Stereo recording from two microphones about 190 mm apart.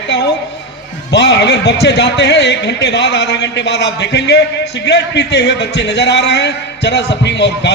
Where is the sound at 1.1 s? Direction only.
60° left (ahead or behind).